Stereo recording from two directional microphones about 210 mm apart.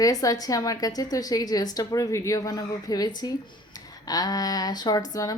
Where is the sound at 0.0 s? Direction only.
15° left (ahead or behind).